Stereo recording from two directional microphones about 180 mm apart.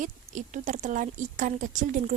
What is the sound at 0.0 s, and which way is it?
Speech, 45° right (ahead or behind).